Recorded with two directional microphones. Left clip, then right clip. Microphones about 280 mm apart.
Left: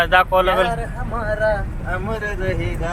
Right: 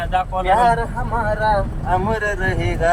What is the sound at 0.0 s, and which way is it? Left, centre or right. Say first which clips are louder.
Speech: left 6 dB; centre.